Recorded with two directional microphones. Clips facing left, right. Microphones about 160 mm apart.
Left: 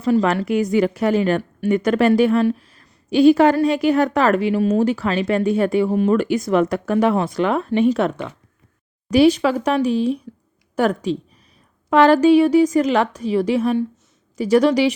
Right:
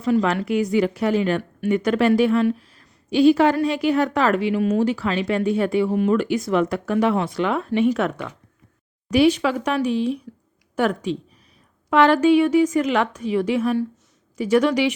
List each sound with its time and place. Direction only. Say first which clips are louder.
0.0 s a woman's voice: left 2 dB; 35° left (ahead or behind)